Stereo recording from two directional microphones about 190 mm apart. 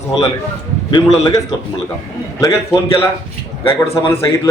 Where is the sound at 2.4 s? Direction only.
15° left (ahead or behind).